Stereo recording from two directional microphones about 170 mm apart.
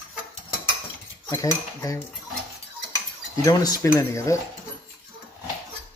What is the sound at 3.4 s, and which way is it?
Cutlery, 20° left (ahead or behind).